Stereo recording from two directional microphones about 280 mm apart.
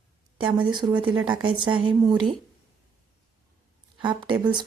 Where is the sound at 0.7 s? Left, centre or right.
Centre.